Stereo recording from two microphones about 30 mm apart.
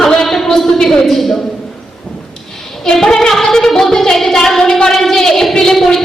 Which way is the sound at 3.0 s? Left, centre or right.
Centre.